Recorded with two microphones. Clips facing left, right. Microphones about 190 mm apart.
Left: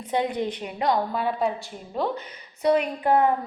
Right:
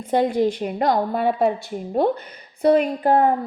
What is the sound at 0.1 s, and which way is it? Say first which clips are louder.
A woman's voice: right 7 dB; 40° right (ahead or behind).